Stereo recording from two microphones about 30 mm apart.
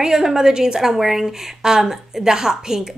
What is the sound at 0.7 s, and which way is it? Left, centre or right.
A woman's voice, centre.